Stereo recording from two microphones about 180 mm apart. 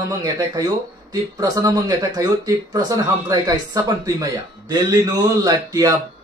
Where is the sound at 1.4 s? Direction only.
20° right (ahead or behind).